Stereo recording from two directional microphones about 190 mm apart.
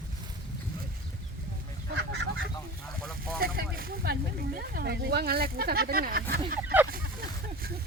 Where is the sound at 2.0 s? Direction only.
65° right (ahead or behind).